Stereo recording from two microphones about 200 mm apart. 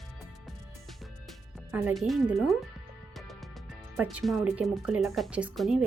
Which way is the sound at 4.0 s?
5° right (ahead or behind).